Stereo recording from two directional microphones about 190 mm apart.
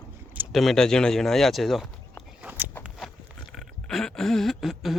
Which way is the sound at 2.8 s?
5° right (ahead or behind).